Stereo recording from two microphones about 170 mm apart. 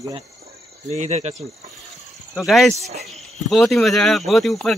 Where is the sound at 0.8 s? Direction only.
40° right (ahead or behind).